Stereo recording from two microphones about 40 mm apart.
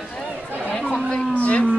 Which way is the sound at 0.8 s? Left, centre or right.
Centre.